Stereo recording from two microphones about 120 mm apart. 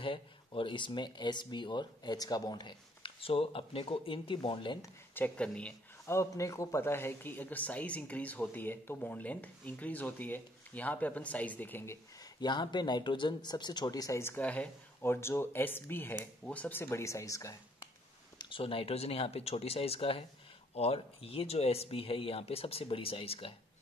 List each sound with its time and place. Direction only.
0.0 s speech: 45° left (ahead or behind)
5.1 s speech: 10° left (ahead or behind)
6.0 s speech: 25° left (ahead or behind)
12.4 s speech: 40° left (ahead or behind)
18.4 s speech: 45° left (ahead or behind)